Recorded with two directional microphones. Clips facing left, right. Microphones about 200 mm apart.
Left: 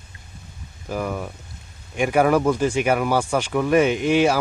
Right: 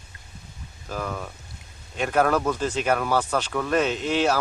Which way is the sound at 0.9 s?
15° left (ahead or behind).